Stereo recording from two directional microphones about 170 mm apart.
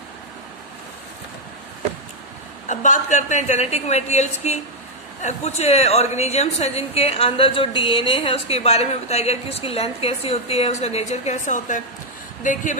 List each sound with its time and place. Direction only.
2.7 s a woman's voice: 45° left (ahead or behind)